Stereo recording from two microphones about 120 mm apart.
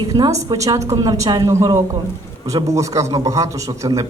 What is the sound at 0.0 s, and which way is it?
Speech, 30° right (ahead or behind).